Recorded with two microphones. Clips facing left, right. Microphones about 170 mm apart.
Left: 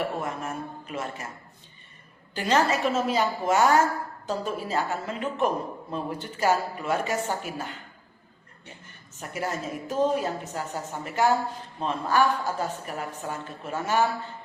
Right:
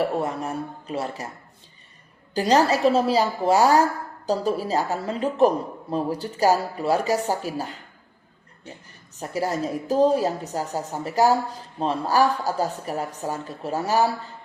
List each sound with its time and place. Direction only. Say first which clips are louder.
0.0 s a woman's voice: right 5 dB; 35° right (ahead or behind)
2.3 s a woman's voice: right 5 dB; 35° right (ahead or behind)
9.1 s a woman's voice: right 6 dB; 35° right (ahead or behind)